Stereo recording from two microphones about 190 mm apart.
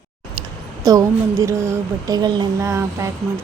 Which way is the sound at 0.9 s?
20° right (ahead or behind).